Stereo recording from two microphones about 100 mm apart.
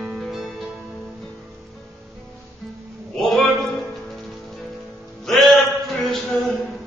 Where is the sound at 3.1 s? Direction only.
5° left (ahead or behind).